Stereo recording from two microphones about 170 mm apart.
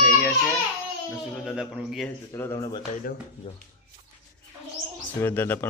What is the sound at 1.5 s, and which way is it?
Speech, 5° right (ahead or behind).